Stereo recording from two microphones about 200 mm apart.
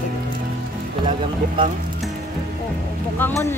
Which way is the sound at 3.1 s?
10° left (ahead or behind).